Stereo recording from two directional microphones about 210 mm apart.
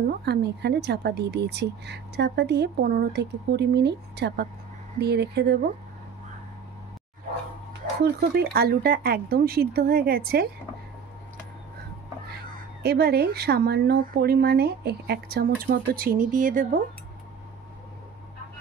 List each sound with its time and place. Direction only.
0.2 s speech: 50° right (ahead or behind)
8.0 s speech: 50° right (ahead or behind)
12.8 s speech: 50° right (ahead or behind)